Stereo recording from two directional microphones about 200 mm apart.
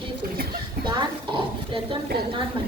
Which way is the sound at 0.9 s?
25° right (ahead or behind).